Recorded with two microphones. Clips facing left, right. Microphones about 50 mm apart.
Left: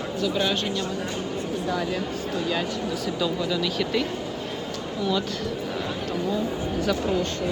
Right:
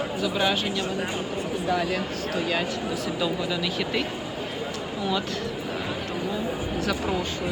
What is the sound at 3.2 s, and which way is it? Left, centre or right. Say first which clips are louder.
Speech: left 2 dB; centre.